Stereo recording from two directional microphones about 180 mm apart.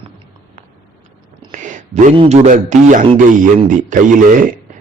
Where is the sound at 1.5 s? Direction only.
45° right (ahead or behind).